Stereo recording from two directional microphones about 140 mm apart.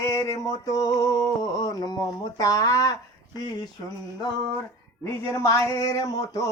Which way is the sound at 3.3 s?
30° left (ahead or behind).